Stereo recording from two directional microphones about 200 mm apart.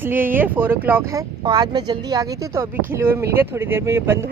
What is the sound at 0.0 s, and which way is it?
Speech, 10° right (ahead or behind).